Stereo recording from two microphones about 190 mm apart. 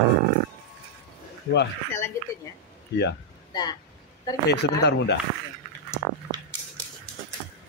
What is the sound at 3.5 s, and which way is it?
Speech, 20° left (ahead or behind).